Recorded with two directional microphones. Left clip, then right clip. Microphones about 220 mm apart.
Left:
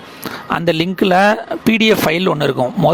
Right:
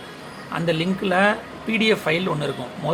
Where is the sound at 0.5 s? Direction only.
55° left (ahead or behind).